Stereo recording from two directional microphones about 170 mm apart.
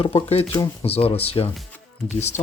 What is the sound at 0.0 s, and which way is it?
Speech, 35° left (ahead or behind).